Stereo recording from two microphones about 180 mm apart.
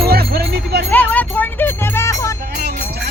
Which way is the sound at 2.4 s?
60° right (ahead or behind).